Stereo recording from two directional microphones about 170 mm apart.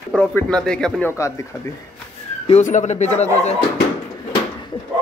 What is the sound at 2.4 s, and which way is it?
Speech, 40° left (ahead or behind).